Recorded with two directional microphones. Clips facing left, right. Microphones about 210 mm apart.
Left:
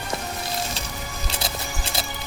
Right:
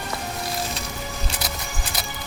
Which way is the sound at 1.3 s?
25° left (ahead or behind).